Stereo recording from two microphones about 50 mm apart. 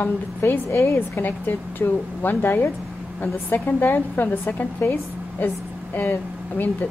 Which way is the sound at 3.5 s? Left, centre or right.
Left.